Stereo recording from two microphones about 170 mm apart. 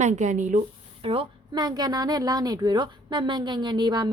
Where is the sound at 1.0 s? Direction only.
30° right (ahead or behind).